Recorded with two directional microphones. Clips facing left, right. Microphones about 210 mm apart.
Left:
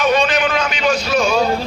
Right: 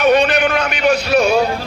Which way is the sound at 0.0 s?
60° right (ahead or behind).